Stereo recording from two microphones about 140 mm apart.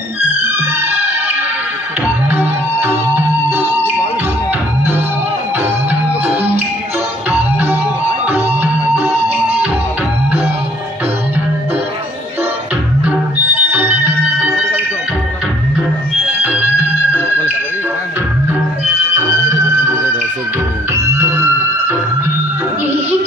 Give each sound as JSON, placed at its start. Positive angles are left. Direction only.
{"t": 2.2, "sound": "music", "side_deg": -10}
{"t": 5.6, "sound": "music", "side_deg": -15}
{"t": 13.0, "sound": "music", "side_deg": -15}
{"t": 20.9, "sound": "music", "side_deg": -20}